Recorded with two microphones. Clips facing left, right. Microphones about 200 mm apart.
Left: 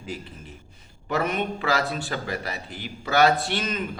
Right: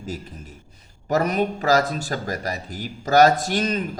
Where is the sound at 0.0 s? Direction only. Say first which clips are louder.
Right 3 dB; 40° right (ahead or behind).